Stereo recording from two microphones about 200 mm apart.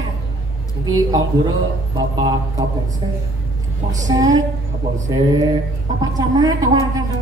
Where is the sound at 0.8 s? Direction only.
20° right (ahead or behind).